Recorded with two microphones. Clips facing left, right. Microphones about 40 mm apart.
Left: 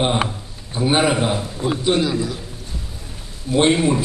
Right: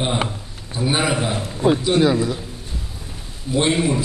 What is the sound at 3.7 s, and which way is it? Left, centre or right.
Speech, centre.